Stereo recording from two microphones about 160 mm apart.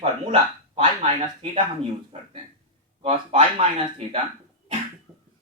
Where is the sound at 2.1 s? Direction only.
45° right (ahead or behind).